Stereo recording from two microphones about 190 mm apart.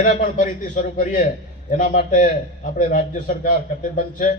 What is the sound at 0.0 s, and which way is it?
A man's voice, 40° left (ahead or behind).